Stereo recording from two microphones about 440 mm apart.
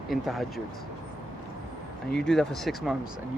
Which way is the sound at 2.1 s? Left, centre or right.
Centre.